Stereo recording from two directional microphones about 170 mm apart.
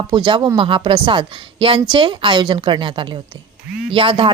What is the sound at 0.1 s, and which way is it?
A woman's voice, 30° right (ahead or behind).